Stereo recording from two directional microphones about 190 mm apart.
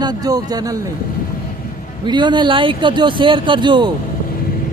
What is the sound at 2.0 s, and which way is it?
Speech, 25° right (ahead or behind).